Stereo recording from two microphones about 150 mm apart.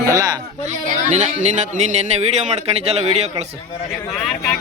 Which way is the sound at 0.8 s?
50° right (ahead or behind).